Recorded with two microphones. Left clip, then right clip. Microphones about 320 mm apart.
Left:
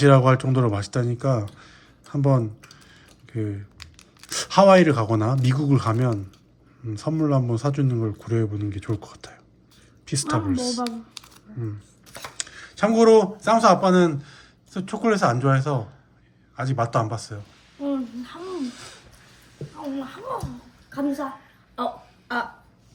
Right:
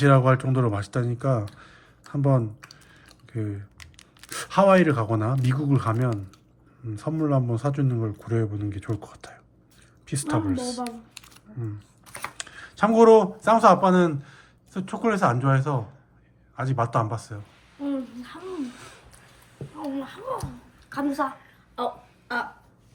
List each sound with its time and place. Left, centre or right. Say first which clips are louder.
0.0 s a man's voice: left 3 dB; centre
11.5 s a sound: left 3 dB; right
12.4 s a man's voice: left 1 dB; centre
18.2 s a sound: left 3 dB; centre
19.9 s speech: left 1 dB; centre
22.3 s speech: left 2 dB; centre